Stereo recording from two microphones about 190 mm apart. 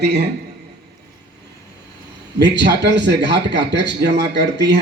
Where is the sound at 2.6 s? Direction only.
65° right (ahead or behind).